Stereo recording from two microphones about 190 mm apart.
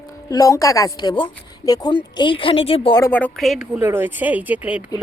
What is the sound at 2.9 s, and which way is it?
Speech, 10° left (ahead or behind).